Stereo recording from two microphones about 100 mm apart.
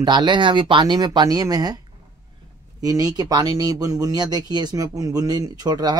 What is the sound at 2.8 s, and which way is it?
Speech, 40° right (ahead or behind).